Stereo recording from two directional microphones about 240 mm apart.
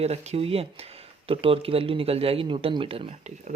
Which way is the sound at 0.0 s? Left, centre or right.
Right.